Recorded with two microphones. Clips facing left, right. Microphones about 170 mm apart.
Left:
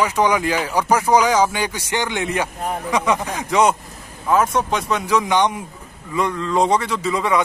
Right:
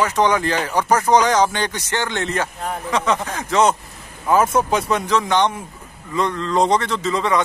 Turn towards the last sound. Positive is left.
turn(degrees=10)  # may be behind; listen again after turning